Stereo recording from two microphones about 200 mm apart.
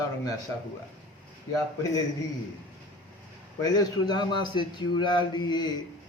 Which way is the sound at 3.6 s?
20° left (ahead or behind).